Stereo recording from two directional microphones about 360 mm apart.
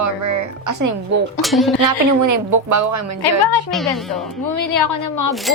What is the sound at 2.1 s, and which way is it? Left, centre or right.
A woman's voice, right.